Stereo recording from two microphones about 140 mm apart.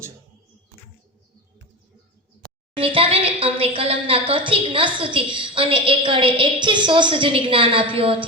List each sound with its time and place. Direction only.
2.7 s a woman's voice: 40° right (ahead or behind)